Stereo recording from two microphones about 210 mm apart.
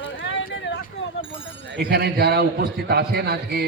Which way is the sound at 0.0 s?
60° left (ahead or behind).